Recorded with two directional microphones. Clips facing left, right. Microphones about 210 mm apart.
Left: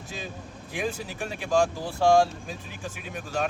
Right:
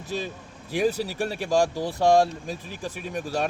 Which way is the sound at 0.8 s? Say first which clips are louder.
Right 7 dB; 35° right (ahead or behind).